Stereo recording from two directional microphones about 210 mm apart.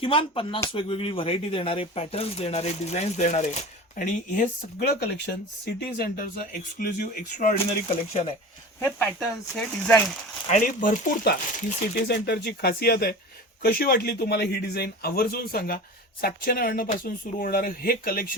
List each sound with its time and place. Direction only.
0.0 s speech: 25° left (ahead or behind)
9.1 s speech: centre (ahead or behind)
10.5 s a man's voice: 40° left (ahead or behind)